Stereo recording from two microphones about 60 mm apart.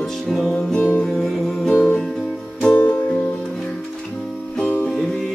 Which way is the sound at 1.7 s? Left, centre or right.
Left.